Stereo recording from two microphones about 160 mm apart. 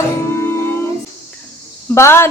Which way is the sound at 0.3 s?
15° left (ahead or behind).